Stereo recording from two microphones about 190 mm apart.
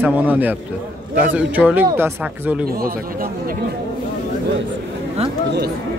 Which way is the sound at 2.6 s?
50° right (ahead or behind).